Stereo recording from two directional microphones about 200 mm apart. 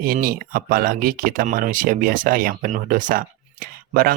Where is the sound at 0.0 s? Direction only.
45° right (ahead or behind).